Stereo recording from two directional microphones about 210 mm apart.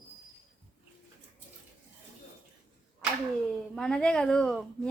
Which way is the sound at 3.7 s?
5° left (ahead or behind).